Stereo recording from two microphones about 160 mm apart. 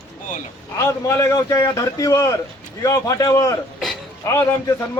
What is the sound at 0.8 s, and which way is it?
A man's voice, 20° left (ahead or behind).